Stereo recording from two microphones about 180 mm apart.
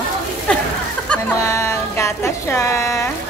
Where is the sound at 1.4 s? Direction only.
15° left (ahead or behind).